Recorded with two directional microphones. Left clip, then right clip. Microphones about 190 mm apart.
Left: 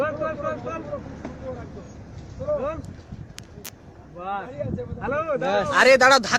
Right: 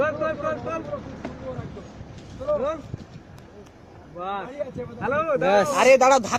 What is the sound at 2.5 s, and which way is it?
Speech, 35° right (ahead or behind).